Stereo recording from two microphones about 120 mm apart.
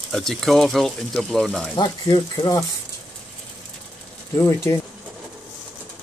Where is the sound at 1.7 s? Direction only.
35° left (ahead or behind).